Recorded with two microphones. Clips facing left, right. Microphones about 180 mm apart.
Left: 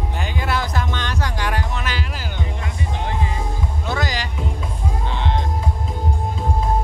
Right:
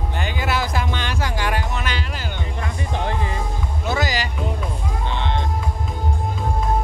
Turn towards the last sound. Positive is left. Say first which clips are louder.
# even
turn(degrees=5)  # may be behind; listen again after turning